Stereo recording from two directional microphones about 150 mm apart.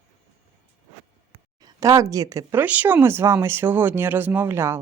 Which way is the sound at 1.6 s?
20° right (ahead or behind).